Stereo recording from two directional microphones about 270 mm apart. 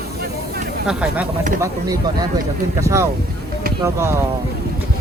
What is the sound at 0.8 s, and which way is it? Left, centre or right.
Speech, centre.